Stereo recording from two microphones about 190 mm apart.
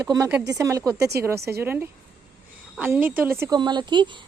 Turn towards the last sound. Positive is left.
turn(degrees=-25)  # may be behind; listen again after turning